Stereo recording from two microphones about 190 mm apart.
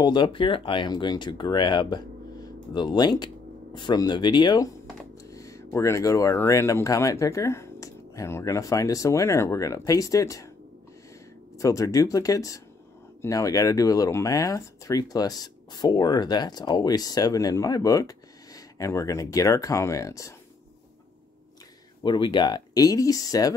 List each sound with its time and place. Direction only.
0.0 s speech: 25° left (ahead or behind)
11.5 s speech: 15° left (ahead or behind)
22.0 s speech: 25° left (ahead or behind)